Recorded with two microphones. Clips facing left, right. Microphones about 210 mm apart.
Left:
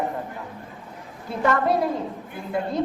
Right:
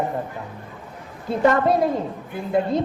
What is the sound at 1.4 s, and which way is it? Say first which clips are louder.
A woman's voice: right 3 dB; 20° right (ahead or behind).